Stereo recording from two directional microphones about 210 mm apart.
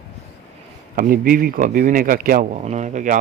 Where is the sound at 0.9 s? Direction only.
40° right (ahead or behind).